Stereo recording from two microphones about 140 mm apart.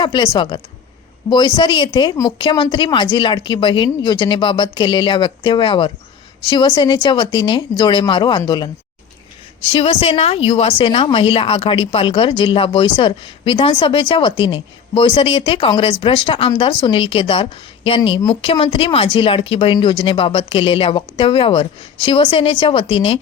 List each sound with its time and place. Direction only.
0.0 s a woman's voice: 35° left (ahead or behind)